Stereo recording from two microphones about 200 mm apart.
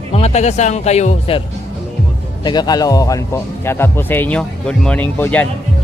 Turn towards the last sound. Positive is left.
turn(degrees=10)  # may be behind; listen again after turning